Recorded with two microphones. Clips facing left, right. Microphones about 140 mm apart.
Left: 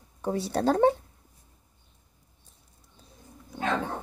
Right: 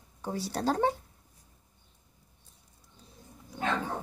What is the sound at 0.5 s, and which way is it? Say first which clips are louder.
Speech: left 4 dB; 55° left (ahead or behind).